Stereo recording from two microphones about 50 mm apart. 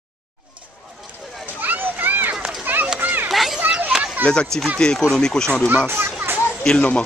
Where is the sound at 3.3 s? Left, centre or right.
Centre.